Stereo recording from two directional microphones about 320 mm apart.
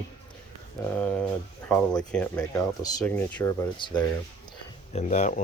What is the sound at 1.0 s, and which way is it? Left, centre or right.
Speech, centre.